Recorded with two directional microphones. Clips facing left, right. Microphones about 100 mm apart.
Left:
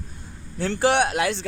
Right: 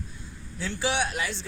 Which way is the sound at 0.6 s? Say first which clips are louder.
Left 8 dB; 60° left (ahead or behind).